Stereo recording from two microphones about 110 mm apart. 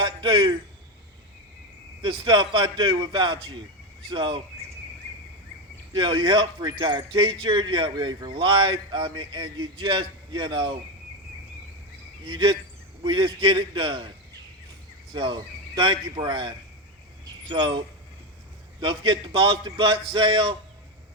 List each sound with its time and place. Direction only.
0.0 s a man's voice: 45° right (ahead or behind)
2.0 s speech: 50° right (ahead or behind)
5.9 s speech: 45° right (ahead or behind)
12.2 s speech: 45° right (ahead or behind)
15.1 s speech: 45° right (ahead or behind)